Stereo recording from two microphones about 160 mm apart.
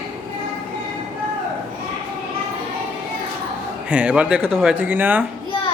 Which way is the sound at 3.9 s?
5° right (ahead or behind).